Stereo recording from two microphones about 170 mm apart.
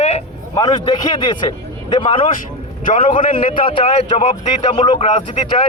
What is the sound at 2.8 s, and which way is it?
Speech, 50° left (ahead or behind).